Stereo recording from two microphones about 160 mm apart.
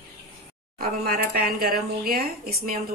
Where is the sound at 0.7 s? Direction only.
65° right (ahead or behind).